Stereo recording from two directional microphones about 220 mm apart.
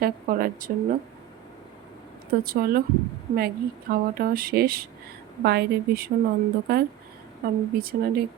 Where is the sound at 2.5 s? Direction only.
40° right (ahead or behind).